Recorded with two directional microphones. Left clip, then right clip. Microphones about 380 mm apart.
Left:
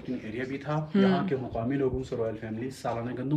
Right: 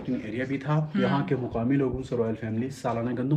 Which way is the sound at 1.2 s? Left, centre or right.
Centre.